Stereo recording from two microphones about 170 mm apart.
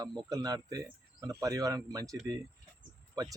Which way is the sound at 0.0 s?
25° right (ahead or behind).